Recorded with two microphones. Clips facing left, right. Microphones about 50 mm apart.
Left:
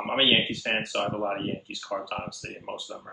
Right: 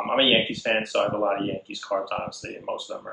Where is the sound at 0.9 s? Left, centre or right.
Right.